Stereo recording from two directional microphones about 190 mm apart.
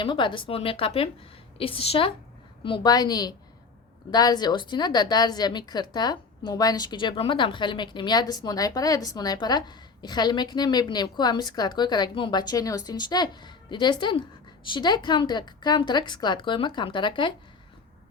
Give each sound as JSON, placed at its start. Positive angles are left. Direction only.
{"t": 0.0, "sound": "a woman's voice", "side_deg": 25}